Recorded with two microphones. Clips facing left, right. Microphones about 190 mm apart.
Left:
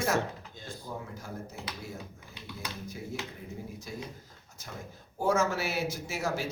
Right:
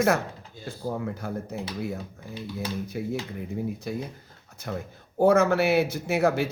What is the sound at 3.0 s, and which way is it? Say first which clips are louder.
Speech: right 8 dB; 70° right (ahead or behind).